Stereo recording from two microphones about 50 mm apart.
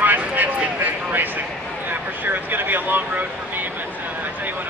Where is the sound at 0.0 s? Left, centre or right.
Right.